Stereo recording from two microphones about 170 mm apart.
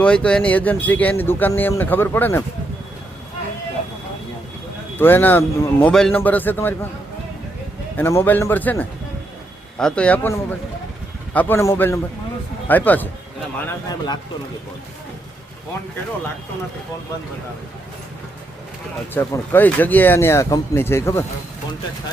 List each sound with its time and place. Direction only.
0.0 s speech: 5° left (ahead or behind)
4.9 s speech: 10° left (ahead or behind)
5.9 s speech: 5° left (ahead or behind)
7.9 s speech: 15° left (ahead or behind)
13.7 s speech: 25° left (ahead or behind)
19.1 s speech: 15° left (ahead or behind)